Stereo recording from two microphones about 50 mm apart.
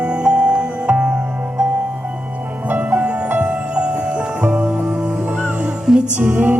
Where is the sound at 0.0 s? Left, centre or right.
Centre.